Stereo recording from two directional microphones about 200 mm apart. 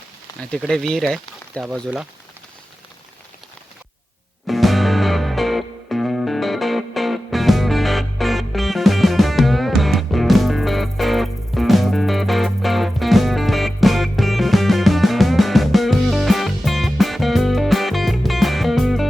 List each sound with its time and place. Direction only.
0.3 s a sound: 20° left (ahead or behind)
0.6 s speech: centre (ahead or behind)
4.4 s music: centre (ahead or behind)